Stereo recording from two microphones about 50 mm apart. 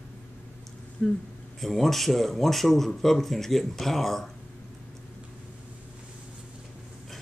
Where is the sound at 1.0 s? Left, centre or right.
Centre.